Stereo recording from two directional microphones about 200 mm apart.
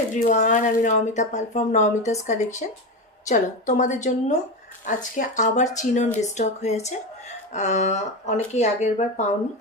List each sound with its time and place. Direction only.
0.1 s speech: 40° left (ahead or behind)